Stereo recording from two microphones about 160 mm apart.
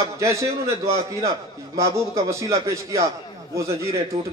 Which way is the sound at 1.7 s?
20° right (ahead or behind).